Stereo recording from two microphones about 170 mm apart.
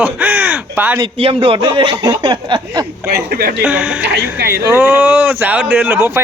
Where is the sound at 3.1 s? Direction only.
65° right (ahead or behind).